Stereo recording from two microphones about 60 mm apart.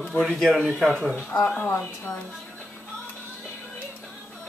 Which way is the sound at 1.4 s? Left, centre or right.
Centre.